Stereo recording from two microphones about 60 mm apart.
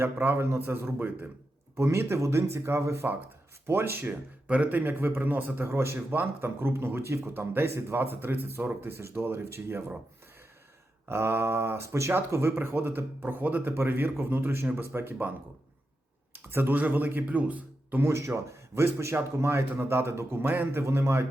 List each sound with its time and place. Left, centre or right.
0.0 s speech: right
1.7 s speech: right
4.4 s a man's voice: right
4.8 s speech: right
11.1 s speech: right
12.3 s speech: right
16.3 s speech: right
18.0 s speech: right
20.8 s speech: right